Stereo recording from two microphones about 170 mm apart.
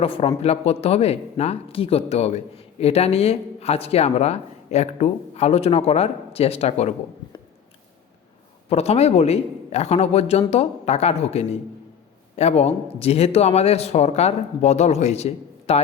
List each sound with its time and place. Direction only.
0.0 s speech: 35° left (ahead or behind)
8.7 s speech: 40° left (ahead or behind)